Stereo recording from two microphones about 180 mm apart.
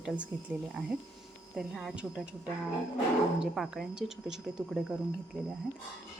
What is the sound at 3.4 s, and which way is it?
Speech, centre (ahead or behind).